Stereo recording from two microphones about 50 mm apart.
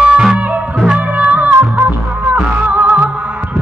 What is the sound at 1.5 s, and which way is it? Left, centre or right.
Music, right.